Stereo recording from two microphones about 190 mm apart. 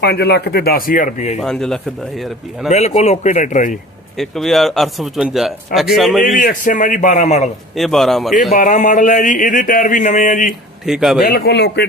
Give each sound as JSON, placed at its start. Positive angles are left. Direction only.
{"t": 0.0, "sound": "speech", "side_deg": 60}
{"t": 1.4, "sound": "speech", "side_deg": 5}
{"t": 2.6, "sound": "a sound", "side_deg": 35}
{"t": 4.2, "sound": "speech", "side_deg": 0}
{"t": 6.3, "sound": "a man's voice", "side_deg": 45}
{"t": 7.8, "sound": "speech", "side_deg": 0}
{"t": 8.5, "sound": "a sound", "side_deg": 40}
{"t": 10.8, "sound": "speech", "side_deg": 0}
{"t": 11.2, "sound": "speech", "side_deg": 50}